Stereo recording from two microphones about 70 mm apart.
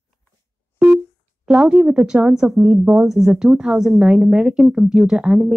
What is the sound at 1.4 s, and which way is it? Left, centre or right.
Speech, centre.